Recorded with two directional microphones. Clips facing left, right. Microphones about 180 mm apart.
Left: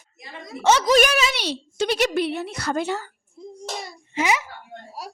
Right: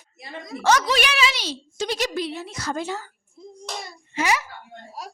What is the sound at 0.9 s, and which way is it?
A woman's voice, 45° left (ahead or behind).